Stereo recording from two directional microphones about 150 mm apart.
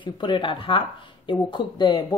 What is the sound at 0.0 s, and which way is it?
Speech, 35° left (ahead or behind).